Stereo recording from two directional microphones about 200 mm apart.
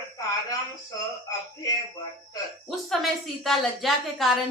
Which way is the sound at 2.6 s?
Centre (ahead or behind).